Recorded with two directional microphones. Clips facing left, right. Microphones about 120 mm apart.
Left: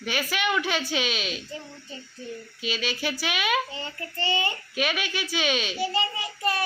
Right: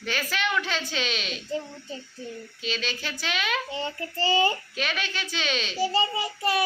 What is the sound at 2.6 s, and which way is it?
A woman's voice, 10° left (ahead or behind).